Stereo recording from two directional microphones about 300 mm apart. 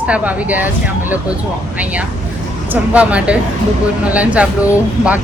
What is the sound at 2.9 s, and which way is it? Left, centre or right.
A woman's voice, centre.